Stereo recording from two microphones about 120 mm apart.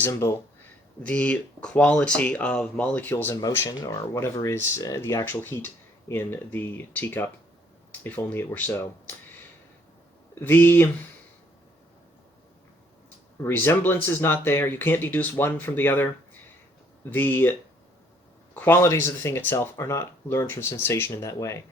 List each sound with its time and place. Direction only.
0.0 s speech: 25° left (ahead or behind)
1.0 s speech: 10° left (ahead or behind)
3.4 s speech: 25° left (ahead or behind)
10.4 s speech: 15° left (ahead or behind)
13.4 s speech: 20° left (ahead or behind)
17.1 s speech: 15° left (ahead or behind)
18.5 s speech: 15° left (ahead or behind)